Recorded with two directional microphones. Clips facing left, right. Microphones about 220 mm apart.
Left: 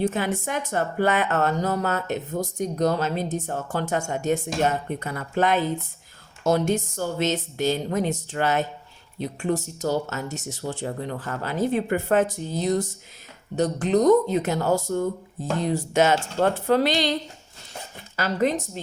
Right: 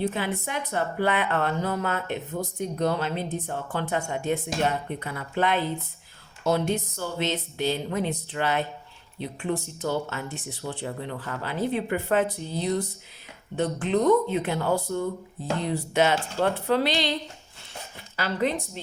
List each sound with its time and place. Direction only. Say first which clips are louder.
0.0 s speech: left 3 dB; 45° left (ahead or behind)
18.2 s speech: left 3 dB; 45° left (ahead or behind)